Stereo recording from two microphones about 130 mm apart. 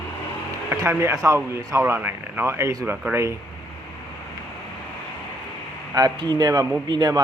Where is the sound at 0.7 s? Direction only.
20° right (ahead or behind).